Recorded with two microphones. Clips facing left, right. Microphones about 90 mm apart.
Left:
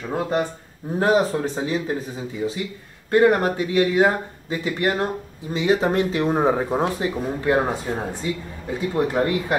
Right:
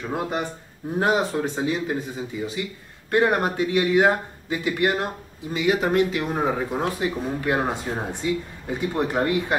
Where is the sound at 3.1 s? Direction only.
15° right (ahead or behind).